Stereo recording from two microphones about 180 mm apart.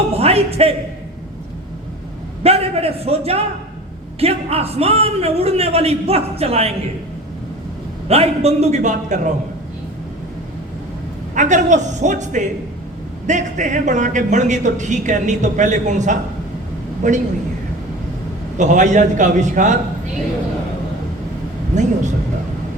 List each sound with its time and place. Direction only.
0.2 s speech: 35° right (ahead or behind)
2.4 s a man's voice: 35° right (ahead or behind)
8.0 s a man's voice: 35° right (ahead or behind)
11.3 s a man's voice: 40° right (ahead or behind)
18.5 s a man's voice: 45° right (ahead or behind)
21.7 s a man's voice: 40° right (ahead or behind)